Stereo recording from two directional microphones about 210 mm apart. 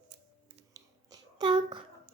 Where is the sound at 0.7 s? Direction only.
20° right (ahead or behind).